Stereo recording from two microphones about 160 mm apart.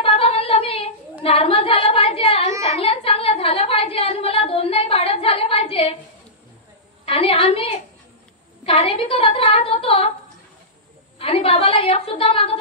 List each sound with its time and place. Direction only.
0.0 s female singing: 35° left (ahead or behind)
1.2 s a woman's voice: 35° left (ahead or behind)
2.6 s a sound: 40° left (ahead or behind)
7.1 s a woman's voice: 35° left (ahead or behind)
11.1 s a woman's voice: 35° left (ahead or behind)